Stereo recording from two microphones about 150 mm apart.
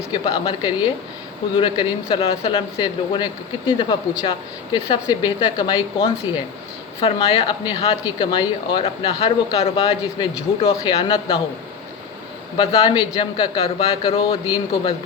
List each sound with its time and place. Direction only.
0.1 s speech: 35° left (ahead or behind)
12.5 s speech: 30° left (ahead or behind)